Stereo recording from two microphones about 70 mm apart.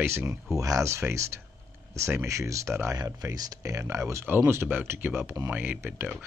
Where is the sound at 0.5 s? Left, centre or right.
Right.